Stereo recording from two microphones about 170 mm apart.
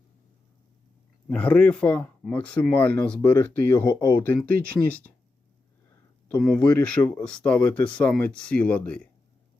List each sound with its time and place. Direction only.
1.3 s speech: 10° left (ahead or behind)
3.2 s speech: 25° left (ahead or behind)
4.2 s speech: 10° left (ahead or behind)
6.5 s speech: 10° left (ahead or behind)